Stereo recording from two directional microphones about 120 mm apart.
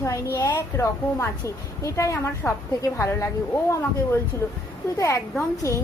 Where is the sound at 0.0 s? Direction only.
25° left (ahead or behind).